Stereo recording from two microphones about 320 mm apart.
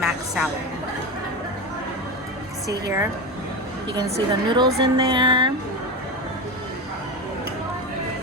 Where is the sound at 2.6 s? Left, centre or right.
Centre.